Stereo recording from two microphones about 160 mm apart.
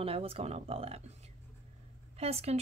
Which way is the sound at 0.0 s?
35° right (ahead or behind).